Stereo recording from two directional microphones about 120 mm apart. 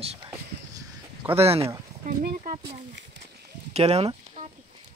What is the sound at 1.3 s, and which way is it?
Speech, 55° right (ahead or behind).